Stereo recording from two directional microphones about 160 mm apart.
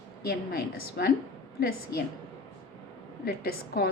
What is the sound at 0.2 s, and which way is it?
Speech, 75° left (ahead or behind).